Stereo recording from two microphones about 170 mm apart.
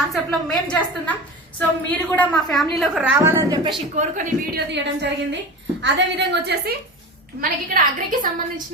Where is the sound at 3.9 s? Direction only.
45° right (ahead or behind).